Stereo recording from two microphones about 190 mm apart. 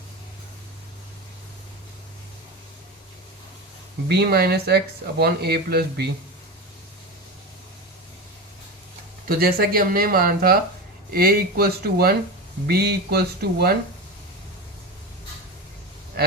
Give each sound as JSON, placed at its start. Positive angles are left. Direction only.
{"t": 4.1, "sound": "speech", "side_deg": -55}
{"t": 9.4, "sound": "speech", "side_deg": -50}